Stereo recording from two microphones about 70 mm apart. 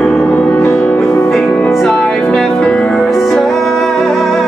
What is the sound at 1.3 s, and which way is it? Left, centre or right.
Music, centre.